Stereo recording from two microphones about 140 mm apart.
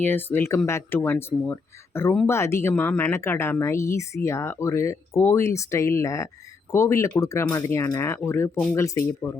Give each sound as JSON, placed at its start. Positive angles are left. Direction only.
{"t": 0.0, "sound": "speech", "side_deg": 15}